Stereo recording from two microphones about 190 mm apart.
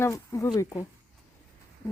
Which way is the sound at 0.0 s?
15° left (ahead or behind).